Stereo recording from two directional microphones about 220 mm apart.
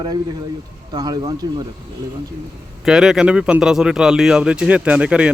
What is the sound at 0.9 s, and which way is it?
Speech, 20° right (ahead or behind).